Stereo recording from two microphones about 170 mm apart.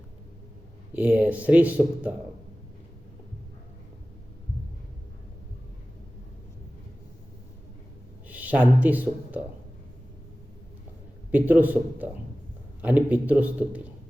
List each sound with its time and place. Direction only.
0.9 s speech: 10° right (ahead or behind)
8.3 s speech: 10° right (ahead or behind)
11.3 s speech: 10° right (ahead or behind)